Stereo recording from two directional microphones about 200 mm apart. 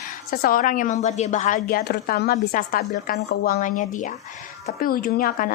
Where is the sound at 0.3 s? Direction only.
45° left (ahead or behind).